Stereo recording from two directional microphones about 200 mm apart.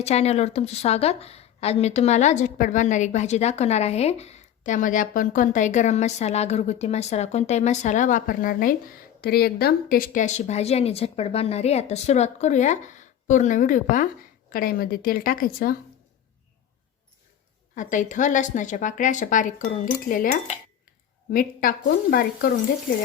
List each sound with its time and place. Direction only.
0.0 s a woman's voice: 30° left (ahead or behind)
17.7 s a woman's voice: 40° left (ahead or behind)